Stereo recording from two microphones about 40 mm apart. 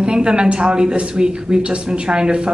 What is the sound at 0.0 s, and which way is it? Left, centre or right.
Speech, right.